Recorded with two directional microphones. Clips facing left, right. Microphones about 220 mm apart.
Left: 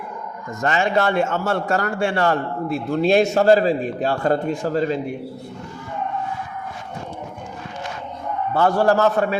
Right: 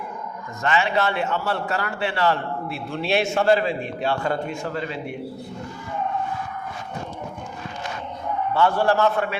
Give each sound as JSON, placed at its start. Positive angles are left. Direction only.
{"t": 0.6, "sound": "a man's voice", "side_deg": 45}
{"t": 8.5, "sound": "a man's voice", "side_deg": 40}